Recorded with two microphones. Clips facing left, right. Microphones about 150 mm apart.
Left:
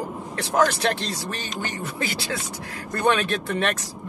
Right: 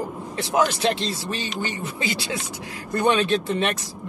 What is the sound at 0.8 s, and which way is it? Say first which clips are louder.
Speech: right 2 dB; 20° right (ahead or behind).